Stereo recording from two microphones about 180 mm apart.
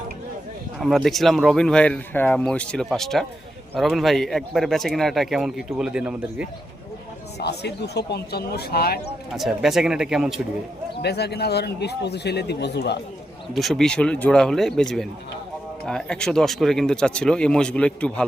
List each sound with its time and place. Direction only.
0.8 s speech: centre (ahead or behind)
7.3 s speech: 65° left (ahead or behind)
9.3 s speech: centre (ahead or behind)
11.0 s speech: 65° left (ahead or behind)
13.5 s speech: centre (ahead or behind)